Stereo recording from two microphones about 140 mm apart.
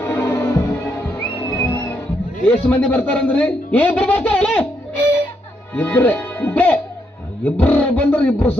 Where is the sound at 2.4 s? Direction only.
10° left (ahead or behind).